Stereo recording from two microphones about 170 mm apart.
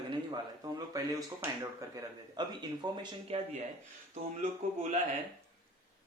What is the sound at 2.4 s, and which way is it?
Speech, 25° right (ahead or behind).